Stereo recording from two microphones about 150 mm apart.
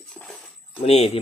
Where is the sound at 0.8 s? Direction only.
40° left (ahead or behind).